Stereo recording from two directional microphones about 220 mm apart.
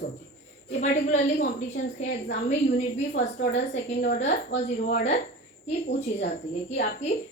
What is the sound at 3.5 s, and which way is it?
A woman's voice, 30° left (ahead or behind).